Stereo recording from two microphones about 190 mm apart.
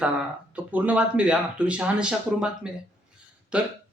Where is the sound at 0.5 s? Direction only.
10° right (ahead or behind).